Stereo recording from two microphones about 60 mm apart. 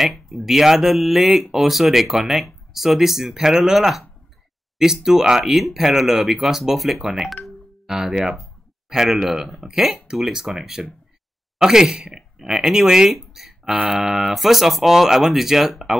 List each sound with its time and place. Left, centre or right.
0.0 s speech: centre
7.4 s music: centre
8.9 s speech: centre
13.7 s mantra: right
13.9 s speech: centre